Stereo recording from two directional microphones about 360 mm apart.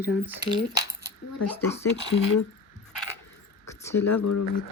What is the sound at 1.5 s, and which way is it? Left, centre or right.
Speech, centre.